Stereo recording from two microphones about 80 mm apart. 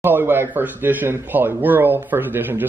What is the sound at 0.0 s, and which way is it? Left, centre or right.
A man's voice, right.